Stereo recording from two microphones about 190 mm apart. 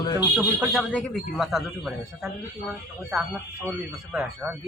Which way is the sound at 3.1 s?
Centre (ahead or behind).